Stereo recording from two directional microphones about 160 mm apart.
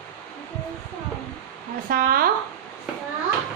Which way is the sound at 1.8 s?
65° right (ahead or behind).